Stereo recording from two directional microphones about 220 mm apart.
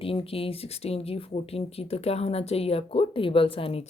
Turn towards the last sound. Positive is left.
turn(degrees=25)  # may be behind; listen again after turning